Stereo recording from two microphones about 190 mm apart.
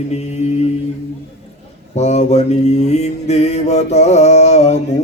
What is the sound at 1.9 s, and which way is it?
Mantra, 35° left (ahead or behind).